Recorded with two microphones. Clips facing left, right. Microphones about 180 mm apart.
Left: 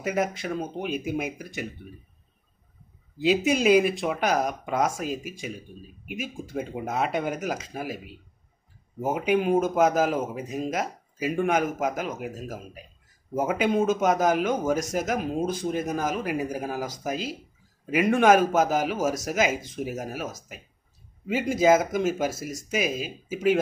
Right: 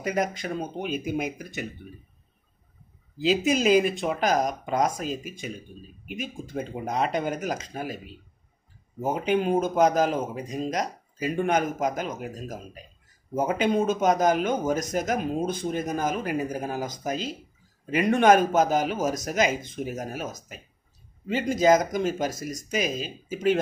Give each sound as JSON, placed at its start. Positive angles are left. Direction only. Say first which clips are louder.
{"t": 0.0, "sound": "a man's voice", "louder": "even", "side_deg": 5}
{"t": 3.2, "sound": "a man's voice", "louder": "even", "side_deg": 0}